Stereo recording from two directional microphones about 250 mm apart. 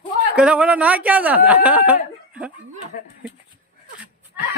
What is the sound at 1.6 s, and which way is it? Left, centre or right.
Chicken, centre.